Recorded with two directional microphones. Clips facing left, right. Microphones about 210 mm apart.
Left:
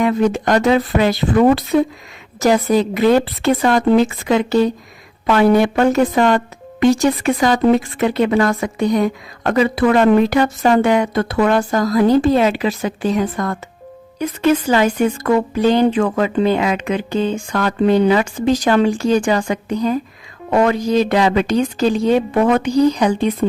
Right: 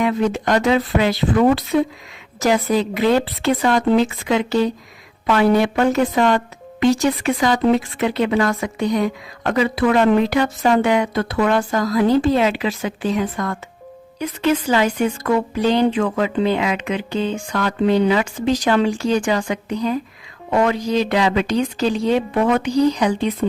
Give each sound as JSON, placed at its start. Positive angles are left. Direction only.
{"t": 0.0, "sound": "a woman's voice", "side_deg": 45}